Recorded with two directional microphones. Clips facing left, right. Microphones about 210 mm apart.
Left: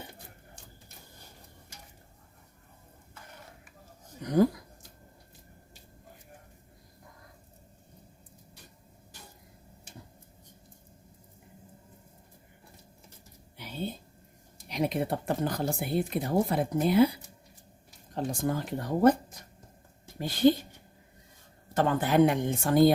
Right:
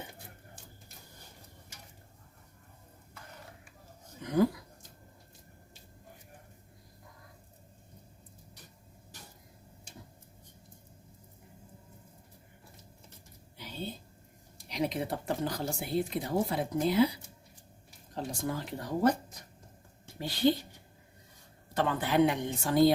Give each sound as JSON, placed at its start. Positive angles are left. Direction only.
{"t": 4.2, "sound": "speech", "side_deg": 40}
{"t": 14.7, "sound": "speech", "side_deg": 55}
{"t": 18.1, "sound": "speech", "side_deg": 55}
{"t": 20.1, "sound": "speech", "side_deg": 50}
{"t": 21.8, "sound": "speech", "side_deg": 45}